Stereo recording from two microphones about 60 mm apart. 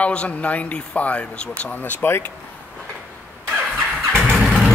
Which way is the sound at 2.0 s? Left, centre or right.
Left.